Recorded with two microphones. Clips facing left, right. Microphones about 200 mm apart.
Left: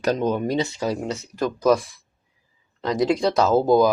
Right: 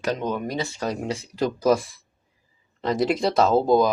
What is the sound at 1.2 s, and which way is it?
Speech, 10° right (ahead or behind).